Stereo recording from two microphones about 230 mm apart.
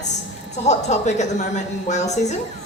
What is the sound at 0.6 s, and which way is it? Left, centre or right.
A woman's voice, left.